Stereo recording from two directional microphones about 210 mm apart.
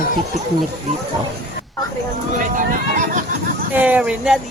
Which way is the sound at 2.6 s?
40° right (ahead or behind).